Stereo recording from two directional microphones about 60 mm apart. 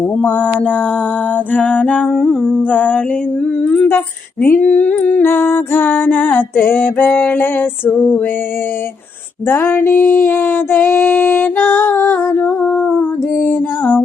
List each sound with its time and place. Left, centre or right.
0.2 s mantra: left
2.1 s humming: centre
2.6 s mantra: left
3.6 s humming: centre
3.8 s music: left
5.2 s music: left
9.5 s music: left
11.0 s music: left
12.6 s mantra: left